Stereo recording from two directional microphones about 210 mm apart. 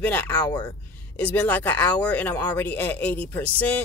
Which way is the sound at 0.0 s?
5° left (ahead or behind).